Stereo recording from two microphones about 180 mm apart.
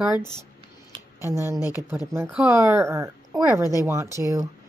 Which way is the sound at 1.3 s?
15° right (ahead or behind).